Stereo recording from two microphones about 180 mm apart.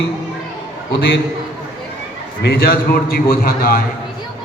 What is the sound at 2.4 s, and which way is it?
A man's voice, 55° left (ahead or behind).